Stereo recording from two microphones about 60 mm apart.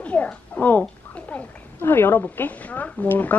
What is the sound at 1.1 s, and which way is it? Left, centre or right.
A woman's voice, left.